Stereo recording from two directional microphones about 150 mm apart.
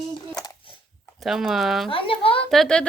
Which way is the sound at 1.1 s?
Centre (ahead or behind).